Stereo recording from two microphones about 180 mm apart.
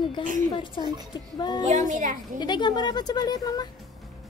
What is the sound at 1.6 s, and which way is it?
Speech, 45° right (ahead or behind).